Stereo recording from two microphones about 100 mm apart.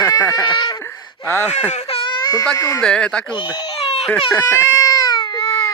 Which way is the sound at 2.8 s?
10° left (ahead or behind).